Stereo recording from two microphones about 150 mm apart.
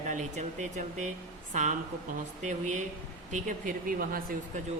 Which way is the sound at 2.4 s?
55° right (ahead or behind).